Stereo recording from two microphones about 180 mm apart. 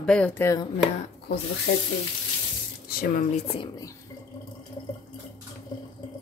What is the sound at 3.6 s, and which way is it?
Speech, 20° left (ahead or behind).